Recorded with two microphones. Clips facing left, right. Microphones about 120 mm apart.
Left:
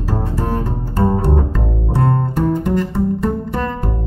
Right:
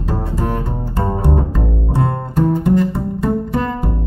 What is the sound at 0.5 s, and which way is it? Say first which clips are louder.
Double bass: left 2 dB; 15° right (ahead or behind).